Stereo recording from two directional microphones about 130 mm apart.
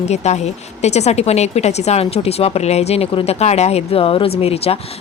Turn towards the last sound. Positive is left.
turn(degrees=50)  # may be behind; listen again after turning